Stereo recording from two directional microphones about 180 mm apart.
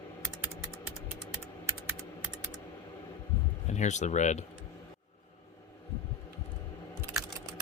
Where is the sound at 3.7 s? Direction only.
40° left (ahead or behind).